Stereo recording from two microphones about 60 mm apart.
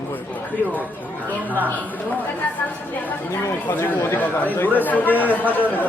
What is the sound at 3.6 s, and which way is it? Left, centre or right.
Speech, left.